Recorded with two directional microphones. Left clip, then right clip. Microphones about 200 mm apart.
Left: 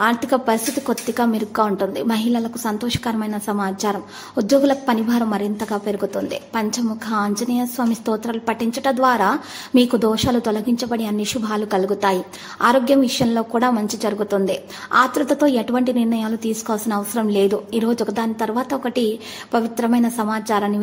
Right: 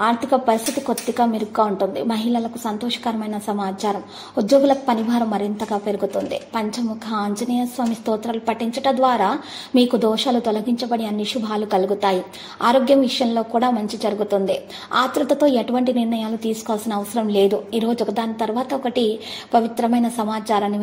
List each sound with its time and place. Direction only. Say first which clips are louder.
0.0 s a woman's voice: even; 20° left (ahead or behind)